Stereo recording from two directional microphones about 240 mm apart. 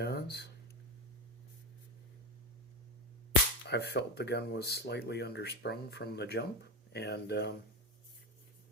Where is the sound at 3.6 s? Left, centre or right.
Left.